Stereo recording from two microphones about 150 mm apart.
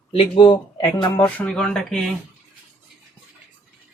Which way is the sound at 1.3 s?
5° left (ahead or behind).